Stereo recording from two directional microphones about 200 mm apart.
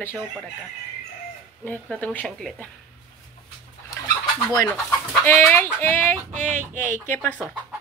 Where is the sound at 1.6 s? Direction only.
10° left (ahead or behind).